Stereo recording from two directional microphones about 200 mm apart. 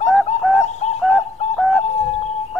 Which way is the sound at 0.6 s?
35° left (ahead or behind).